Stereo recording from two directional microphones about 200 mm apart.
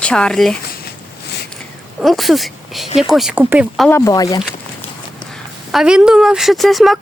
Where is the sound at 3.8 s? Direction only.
15° left (ahead or behind).